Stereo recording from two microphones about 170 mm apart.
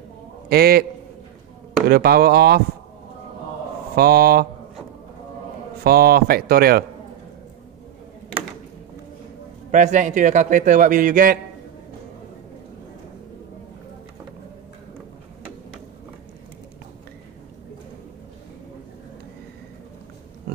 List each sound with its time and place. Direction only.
0.5 s speech: 65° right (ahead or behind)
1.9 s speech: 65° right (ahead or behind)
3.9 s speech: 65° right (ahead or behind)
5.9 s speech: 65° right (ahead or behind)
9.7 s a man's voice: 45° right (ahead or behind)